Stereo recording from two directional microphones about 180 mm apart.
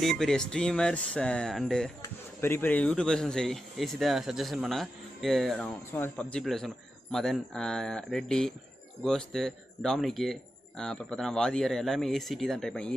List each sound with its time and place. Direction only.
0.0 s speech: centre (ahead or behind)
2.0 s speech: 10° left (ahead or behind)
5.9 s speech: 10° left (ahead or behind)